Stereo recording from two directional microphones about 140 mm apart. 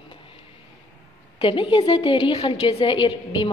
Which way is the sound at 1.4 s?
35° left (ahead or behind).